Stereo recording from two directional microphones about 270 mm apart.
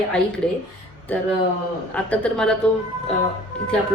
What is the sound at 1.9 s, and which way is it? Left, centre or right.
Speech, centre.